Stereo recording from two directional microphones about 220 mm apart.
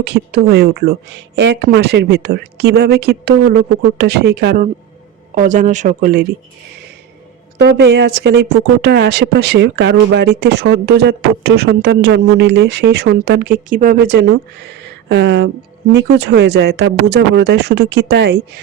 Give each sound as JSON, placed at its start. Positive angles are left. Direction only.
{"t": 0.0, "sound": "speech", "side_deg": -50}
{"t": 7.6, "sound": "speech", "side_deg": -45}